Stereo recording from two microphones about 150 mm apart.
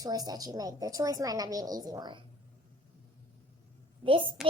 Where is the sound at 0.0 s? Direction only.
25° right (ahead or behind).